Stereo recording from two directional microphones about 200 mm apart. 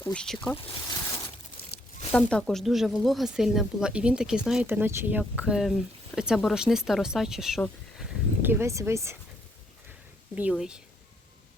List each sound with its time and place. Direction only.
0.0 s speech: 5° left (ahead or behind)
0.5 s a sound: 25° left (ahead or behind)
2.1 s speech: 5° left (ahead or behind); by 9.1 s 15° right (ahead or behind)
10.3 s speech: 5° right (ahead or behind)